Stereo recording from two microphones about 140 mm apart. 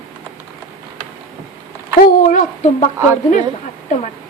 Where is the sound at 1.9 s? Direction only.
80° left.